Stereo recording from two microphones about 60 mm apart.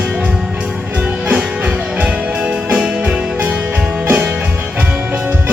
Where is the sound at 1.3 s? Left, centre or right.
Centre.